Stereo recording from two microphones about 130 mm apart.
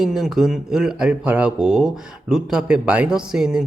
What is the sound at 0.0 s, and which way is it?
Speech, 5° right (ahead or behind).